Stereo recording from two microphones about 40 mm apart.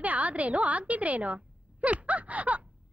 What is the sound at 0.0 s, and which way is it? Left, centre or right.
A woman's voice, right.